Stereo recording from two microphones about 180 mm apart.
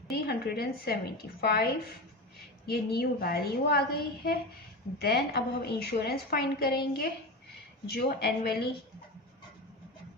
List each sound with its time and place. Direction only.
0.3 s a woman's voice: 60° left (ahead or behind)